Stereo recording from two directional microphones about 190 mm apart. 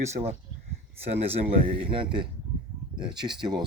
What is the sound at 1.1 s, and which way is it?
Speech, 30° right (ahead or behind).